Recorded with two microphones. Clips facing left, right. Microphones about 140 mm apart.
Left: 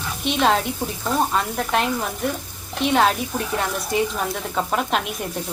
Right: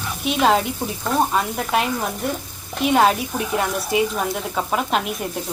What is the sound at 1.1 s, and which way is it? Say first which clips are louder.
Speech: right 2 dB; 5° right (ahead or behind).